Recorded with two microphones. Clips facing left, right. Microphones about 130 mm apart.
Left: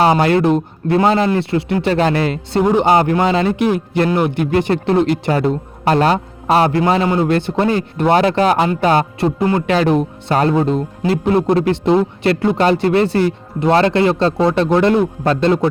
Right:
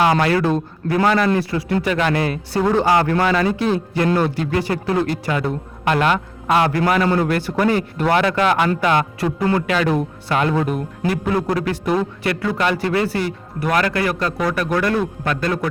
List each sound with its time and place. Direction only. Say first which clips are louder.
0.0 s speech: left 4 dB; 30° left (ahead or behind)
2.5 s speech: left 4 dB; 20° left (ahead or behind)
5.5 s speech: left 5 dB; 35° left (ahead or behind)
9.9 s speech: left 4 dB; 20° left (ahead or behind)